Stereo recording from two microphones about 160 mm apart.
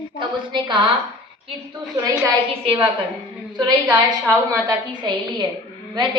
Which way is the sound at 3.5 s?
25° right (ahead or behind).